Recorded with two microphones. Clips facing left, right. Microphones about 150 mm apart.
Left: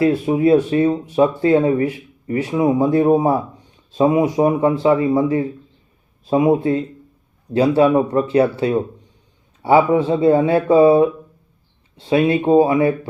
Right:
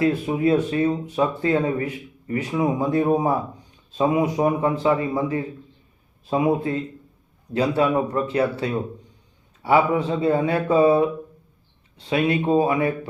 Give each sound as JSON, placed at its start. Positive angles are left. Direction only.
{"t": 0.0, "sound": "speech", "side_deg": 30}